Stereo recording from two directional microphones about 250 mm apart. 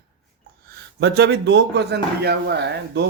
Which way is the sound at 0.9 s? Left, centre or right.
Right.